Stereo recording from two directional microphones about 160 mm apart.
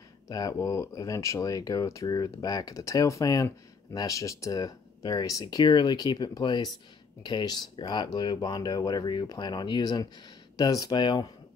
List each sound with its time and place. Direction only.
0.3 s speech: 20° left (ahead or behind)